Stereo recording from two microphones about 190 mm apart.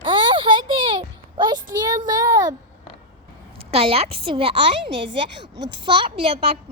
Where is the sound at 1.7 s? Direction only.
20° right (ahead or behind).